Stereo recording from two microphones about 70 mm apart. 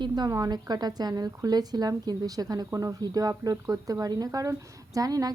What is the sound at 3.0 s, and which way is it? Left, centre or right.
A woman's voice, right.